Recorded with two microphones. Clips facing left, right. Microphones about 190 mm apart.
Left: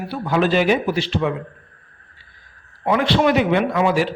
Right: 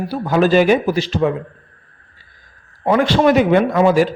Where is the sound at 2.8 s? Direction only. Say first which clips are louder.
Right 3 dB; 45° right (ahead or behind).